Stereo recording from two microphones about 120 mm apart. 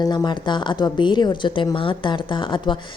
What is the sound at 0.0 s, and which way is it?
A woman's voice, 35° left (ahead or behind).